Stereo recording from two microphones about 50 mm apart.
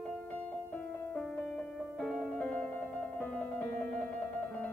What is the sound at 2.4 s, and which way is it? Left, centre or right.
Music, left.